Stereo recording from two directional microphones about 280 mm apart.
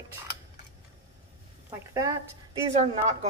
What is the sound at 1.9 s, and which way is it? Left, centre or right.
Speech, centre.